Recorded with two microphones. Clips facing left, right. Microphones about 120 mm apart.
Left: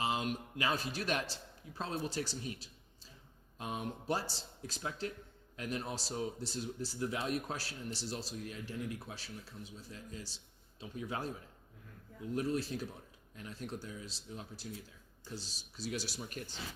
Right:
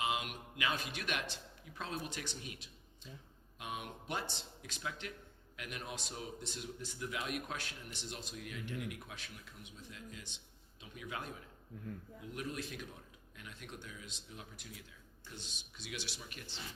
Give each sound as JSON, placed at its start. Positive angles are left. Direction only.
{"t": 0.0, "sound": "a man's voice", "side_deg": 35}